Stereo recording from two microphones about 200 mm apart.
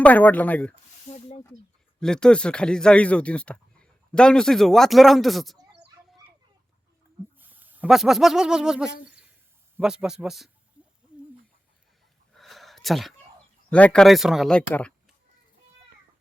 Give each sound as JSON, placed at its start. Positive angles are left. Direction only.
{"t": 0.0, "sound": "speech", "side_deg": 10}
{"t": 1.1, "sound": "speech", "side_deg": 35}
{"t": 2.0, "sound": "speech", "side_deg": 5}
{"t": 7.3, "sound": "speech", "side_deg": -10}
{"t": 9.0, "sound": "a sound", "side_deg": -5}
{"t": 9.7, "sound": "speech", "side_deg": -5}
{"t": 12.3, "sound": "a sound", "side_deg": 0}
{"t": 13.7, "sound": "speech", "side_deg": 5}